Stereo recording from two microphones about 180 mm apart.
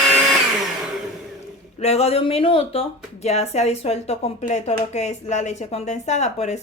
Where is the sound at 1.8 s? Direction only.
35° left (ahead or behind).